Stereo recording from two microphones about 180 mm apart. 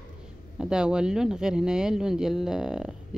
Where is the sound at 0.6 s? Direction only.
5° right (ahead or behind).